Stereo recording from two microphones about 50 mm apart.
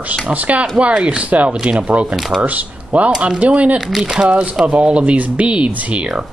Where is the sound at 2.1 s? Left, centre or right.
Centre.